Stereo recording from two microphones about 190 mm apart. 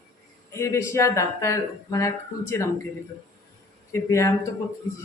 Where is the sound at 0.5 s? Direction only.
15° left (ahead or behind).